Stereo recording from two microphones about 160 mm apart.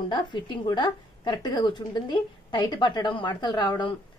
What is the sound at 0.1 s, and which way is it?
Speech, 30° left (ahead or behind).